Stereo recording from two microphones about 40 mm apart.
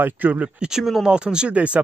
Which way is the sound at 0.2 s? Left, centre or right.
Right.